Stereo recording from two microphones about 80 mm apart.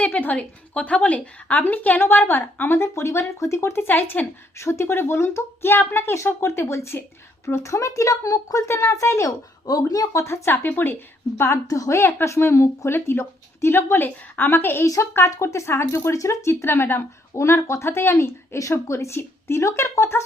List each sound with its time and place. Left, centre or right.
0.0 s a woman's voice: left
4.5 s speech: left
8.6 s speech: left
9.6 s speech: left